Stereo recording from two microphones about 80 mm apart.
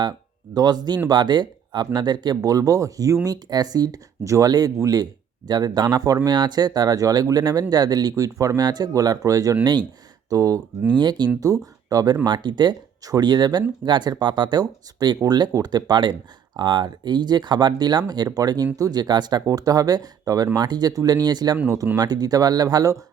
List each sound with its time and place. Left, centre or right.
0.5 s speech: right
3.2 s speech: right
10.9 s speech: right
11.3 s speech: right
12.2 s speech: right
14.6 s speech: right